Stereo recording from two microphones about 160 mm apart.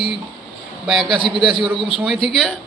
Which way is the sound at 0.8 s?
Centre (ahead or behind).